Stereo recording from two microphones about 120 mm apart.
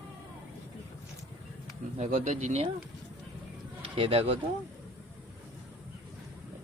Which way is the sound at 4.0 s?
50° right (ahead or behind).